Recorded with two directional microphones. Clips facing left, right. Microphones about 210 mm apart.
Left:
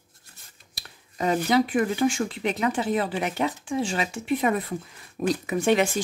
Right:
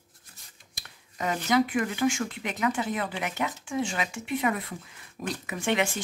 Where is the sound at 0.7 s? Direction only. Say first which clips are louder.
Left 3 dB; 30° left (ahead or behind).